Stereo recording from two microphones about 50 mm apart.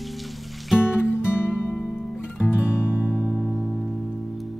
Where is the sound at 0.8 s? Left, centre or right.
Left.